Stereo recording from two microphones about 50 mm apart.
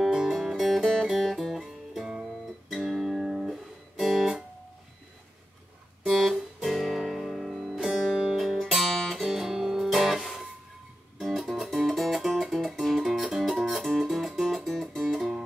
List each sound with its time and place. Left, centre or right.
0.0 s music: centre
6.0 s music: centre